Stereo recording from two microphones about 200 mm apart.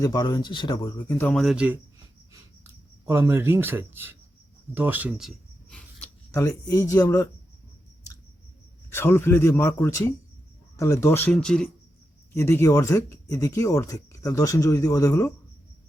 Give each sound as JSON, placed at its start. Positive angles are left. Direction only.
{"t": 0.0, "sound": "speech", "side_deg": 20}
{"t": 3.1, "sound": "speech", "side_deg": -10}
{"t": 6.0, "sound": "speech", "side_deg": 15}
{"t": 8.9, "sound": "speech", "side_deg": 10}